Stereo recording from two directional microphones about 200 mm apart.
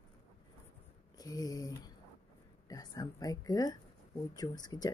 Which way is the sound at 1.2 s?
20° left (ahead or behind).